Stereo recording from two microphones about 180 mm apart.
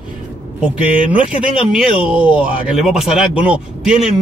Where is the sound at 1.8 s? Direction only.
5° right (ahead or behind).